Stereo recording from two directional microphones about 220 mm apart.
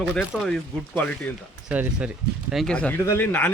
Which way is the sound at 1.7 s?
5° right (ahead or behind).